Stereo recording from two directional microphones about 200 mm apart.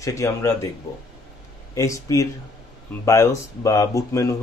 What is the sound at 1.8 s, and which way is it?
Speech, 15° left (ahead or behind).